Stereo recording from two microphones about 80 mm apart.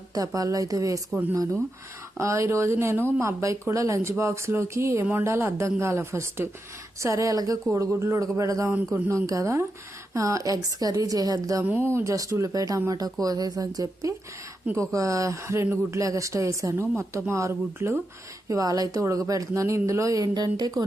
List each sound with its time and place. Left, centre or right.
0.1 s speech: right
2.1 s a woman's voice: right
7.0 s a woman's voice: right
11.6 s speech: right
11.9 s a woman's voice: right
16.0 s a woman's voice: right
18.4 s speech: right